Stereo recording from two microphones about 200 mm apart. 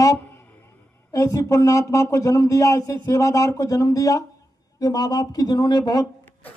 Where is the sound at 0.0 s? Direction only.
15° left (ahead or behind).